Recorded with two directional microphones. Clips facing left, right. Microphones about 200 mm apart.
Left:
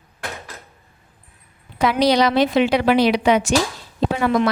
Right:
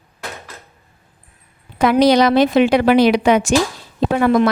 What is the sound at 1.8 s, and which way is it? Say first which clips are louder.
A woman's voice: right 4 dB; 50° right (ahead or behind).